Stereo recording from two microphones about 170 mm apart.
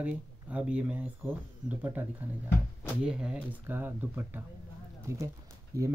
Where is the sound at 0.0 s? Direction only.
5° right (ahead or behind).